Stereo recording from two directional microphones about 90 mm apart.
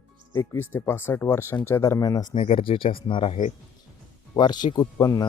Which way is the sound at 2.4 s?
85° left.